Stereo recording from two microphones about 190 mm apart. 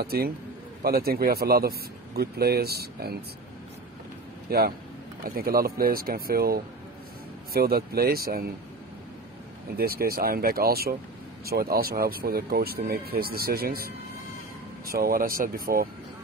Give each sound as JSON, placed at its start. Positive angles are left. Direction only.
{"t": 0.0, "sound": "speech", "side_deg": -55}
{"t": 4.5, "sound": "speech", "side_deg": -55}
{"t": 9.8, "sound": "speech", "side_deg": -50}
{"t": 14.9, "sound": "speech", "side_deg": -50}